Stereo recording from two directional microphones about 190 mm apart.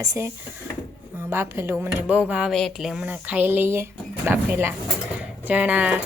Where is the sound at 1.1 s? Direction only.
10° right (ahead or behind).